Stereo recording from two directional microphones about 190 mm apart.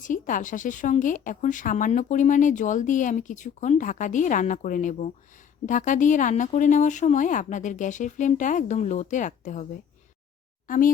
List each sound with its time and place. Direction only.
0.0 s a woman's voice: 45° left (ahead or behind)
10.7 s speech: 45° left (ahead or behind)